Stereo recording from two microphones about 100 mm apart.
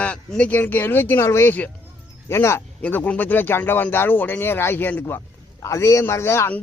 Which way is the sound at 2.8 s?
15° left (ahead or behind).